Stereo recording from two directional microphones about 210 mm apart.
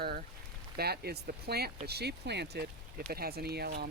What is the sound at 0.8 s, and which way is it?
Speech, 50° right (ahead or behind).